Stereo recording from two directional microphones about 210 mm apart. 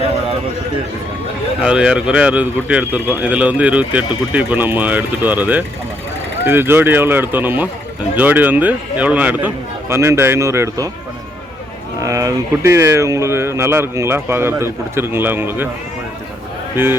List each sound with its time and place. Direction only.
1.6 s speech: 5° right (ahead or behind)
11.9 s speech: 15° right (ahead or behind)
16.7 s speech: 10° right (ahead or behind)